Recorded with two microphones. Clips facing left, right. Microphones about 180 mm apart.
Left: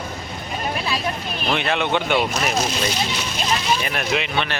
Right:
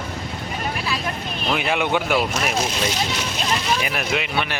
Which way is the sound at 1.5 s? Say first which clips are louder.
Even; 10° right (ahead or behind).